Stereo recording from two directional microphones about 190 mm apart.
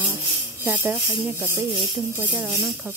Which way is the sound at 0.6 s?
10° right (ahead or behind).